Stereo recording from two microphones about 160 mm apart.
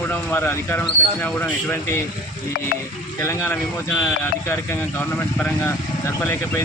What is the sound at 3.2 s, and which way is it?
Speech, 15° left (ahead or behind).